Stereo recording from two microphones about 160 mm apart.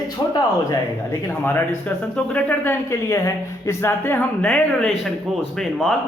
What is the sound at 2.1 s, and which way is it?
Speech, 10° left (ahead or behind).